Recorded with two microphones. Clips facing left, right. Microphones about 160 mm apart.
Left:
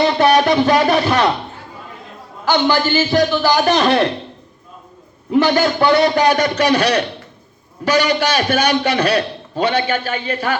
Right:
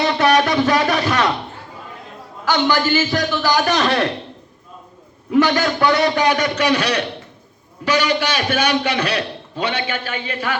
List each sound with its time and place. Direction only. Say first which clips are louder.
0.0 s a sound: left 3 dB; 30° left (ahead or behind)
2.4 s a man's voice: left 2 dB; 30° left (ahead or behind)
5.3 s a man's voice: left 2 dB; 25° left (ahead or behind)